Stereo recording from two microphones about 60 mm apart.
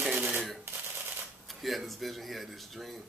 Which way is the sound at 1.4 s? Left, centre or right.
Centre.